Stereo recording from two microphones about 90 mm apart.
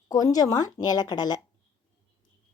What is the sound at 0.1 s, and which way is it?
Speech, 45° left (ahead or behind).